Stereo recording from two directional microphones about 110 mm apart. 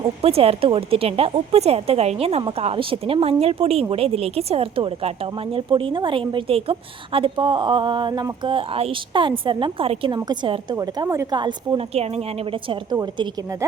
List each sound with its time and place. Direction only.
0.0 s speech: 65° right (ahead or behind)
2.7 s a woman's voice: 55° right (ahead or behind)
10.1 s a woman's voice: 40° right (ahead or behind)
10.8 s speech: 30° right (ahead or behind)
11.3 s a woman's voice: 40° right (ahead or behind)
12.9 s a woman's voice: 40° right (ahead or behind)